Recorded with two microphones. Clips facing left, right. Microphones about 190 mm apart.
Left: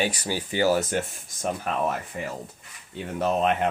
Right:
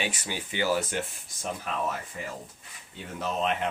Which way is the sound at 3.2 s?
55° left (ahead or behind).